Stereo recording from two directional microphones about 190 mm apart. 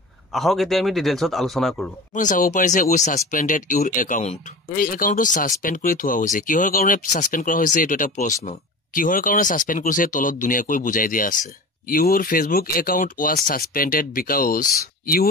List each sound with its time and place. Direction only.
0.3 s speech: centre (ahead or behind)
2.1 s speech: 45° left (ahead or behind)